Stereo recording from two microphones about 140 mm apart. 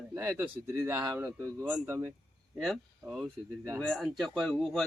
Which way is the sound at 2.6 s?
5° left (ahead or behind).